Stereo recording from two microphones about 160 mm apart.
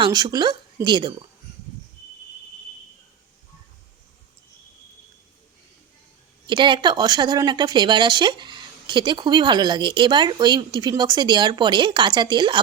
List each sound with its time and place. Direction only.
0.0 s speech: 25° right (ahead or behind)
6.5 s speech: 30° right (ahead or behind)